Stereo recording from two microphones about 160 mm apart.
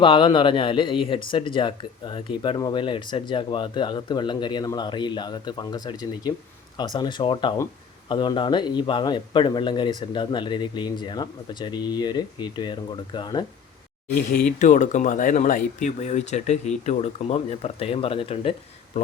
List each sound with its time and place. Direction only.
0.0 s speech: 30° left (ahead or behind)
14.3 s speech: 55° left (ahead or behind); by 18.5 s 35° left (ahead or behind)